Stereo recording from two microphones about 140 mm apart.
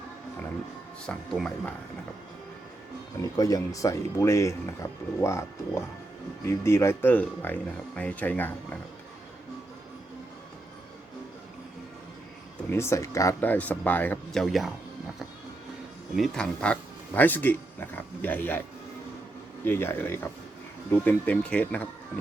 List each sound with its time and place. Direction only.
1.0 s speech: 5° left (ahead or behind)
3.2 s speech: 25° left (ahead or behind)
12.7 s speech: 20° left (ahead or behind)
14.4 s speech: centre (ahead or behind)
16.1 s speech: centre (ahead or behind)
19.6 s speech: 15° left (ahead or behind)